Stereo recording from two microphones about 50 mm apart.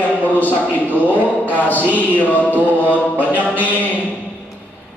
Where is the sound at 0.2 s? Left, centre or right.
Left.